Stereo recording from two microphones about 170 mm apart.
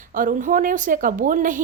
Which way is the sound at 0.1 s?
55° right (ahead or behind).